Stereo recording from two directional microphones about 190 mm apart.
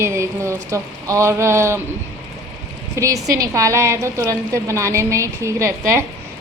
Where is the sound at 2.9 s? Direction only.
15° right (ahead or behind).